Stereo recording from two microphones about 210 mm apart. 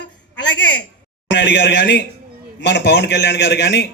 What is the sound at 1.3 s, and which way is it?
A man's voice, 55° left (ahead or behind).